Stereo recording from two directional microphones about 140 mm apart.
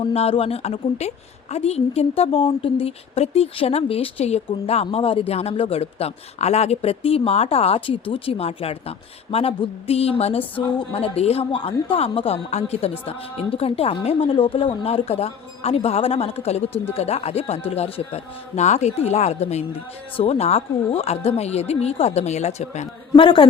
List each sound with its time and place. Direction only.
0.0 s a woman's voice: 45° left (ahead or behind)
23.1 s a man's voice: 35° left (ahead or behind)